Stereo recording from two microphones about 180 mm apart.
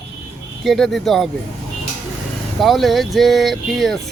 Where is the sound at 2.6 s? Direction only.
Centre (ahead or behind).